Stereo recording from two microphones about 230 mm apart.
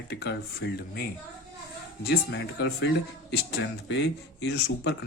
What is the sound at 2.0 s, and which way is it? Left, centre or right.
Speech, left.